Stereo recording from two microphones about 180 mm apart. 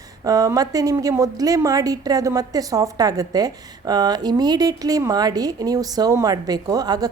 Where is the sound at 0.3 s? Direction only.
20° right (ahead or behind).